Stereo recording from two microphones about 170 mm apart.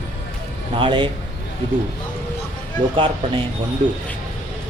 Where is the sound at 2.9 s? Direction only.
30° right (ahead or behind).